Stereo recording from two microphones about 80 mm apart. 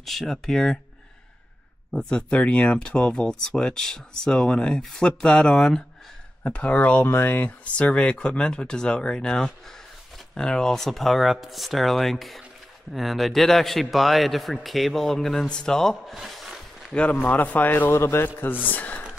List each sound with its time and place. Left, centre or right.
0.0 s a man's voice: centre
1.9 s a man's voice: centre
16.2 s a sound: centre
17.1 s a man's voice: left
18.7 s speech: left